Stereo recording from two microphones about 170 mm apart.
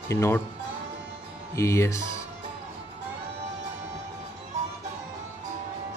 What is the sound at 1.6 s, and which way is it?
Speech, 15° left (ahead or behind).